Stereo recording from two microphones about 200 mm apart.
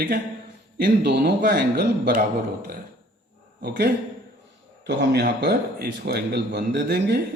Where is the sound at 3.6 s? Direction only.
50° right (ahead or behind).